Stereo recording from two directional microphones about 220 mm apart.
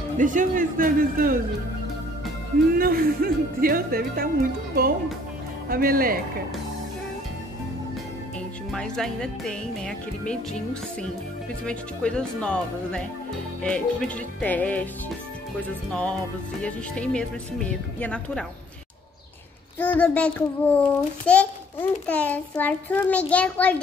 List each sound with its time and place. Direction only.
0.2 s speech: 35° right (ahead or behind)
2.8 s speech: 40° right (ahead or behind)
5.7 s speech: 40° right (ahead or behind)
8.7 s a child's voice: 5° left (ahead or behind)
15.9 s speech: 5° left (ahead or behind)
19.8 s a child's voice: 5° left (ahead or behind)